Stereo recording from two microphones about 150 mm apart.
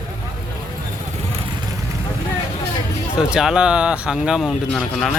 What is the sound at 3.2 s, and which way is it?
Speech, 5° right (ahead or behind).